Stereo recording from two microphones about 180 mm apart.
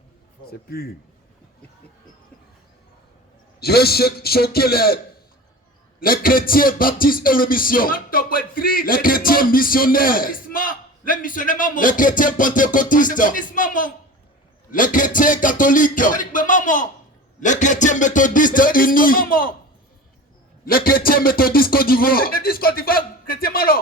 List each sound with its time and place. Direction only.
0.7 s speech: 60° left (ahead or behind)
3.6 s speech: 60° left (ahead or behind)
6.0 s music: 55° left (ahead or behind)
20.7 s speech: 55° left (ahead or behind)